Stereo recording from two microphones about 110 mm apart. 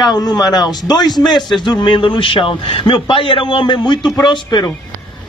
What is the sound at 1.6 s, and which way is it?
A man's voice, 45° left (ahead or behind).